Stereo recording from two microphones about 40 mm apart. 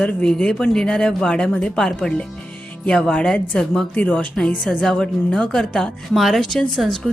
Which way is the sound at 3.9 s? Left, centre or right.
Left.